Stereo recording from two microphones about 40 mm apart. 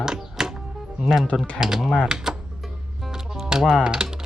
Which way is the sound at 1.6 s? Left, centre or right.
Centre.